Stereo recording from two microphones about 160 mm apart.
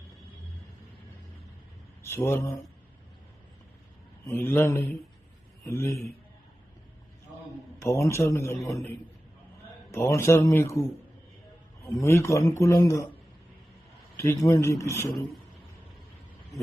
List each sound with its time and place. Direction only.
2.0 s speech: 15° left (ahead or behind)
4.3 s speech: 15° left (ahead or behind)
7.8 s speech: 15° left (ahead or behind)
9.9 s speech: 15° left (ahead or behind)
11.9 s speech: 20° left (ahead or behind)
14.2 s speech: 15° left (ahead or behind)